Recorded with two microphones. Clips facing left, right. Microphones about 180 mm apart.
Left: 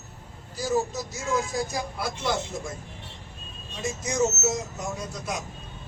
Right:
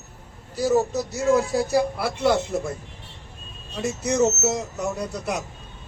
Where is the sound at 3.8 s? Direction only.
65° right (ahead or behind).